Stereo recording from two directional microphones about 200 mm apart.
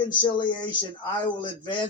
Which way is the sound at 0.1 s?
20° left (ahead or behind).